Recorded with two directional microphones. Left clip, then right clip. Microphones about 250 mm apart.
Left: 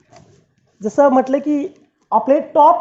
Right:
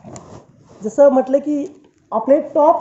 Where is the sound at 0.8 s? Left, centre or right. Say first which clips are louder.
Right 1 dB; left.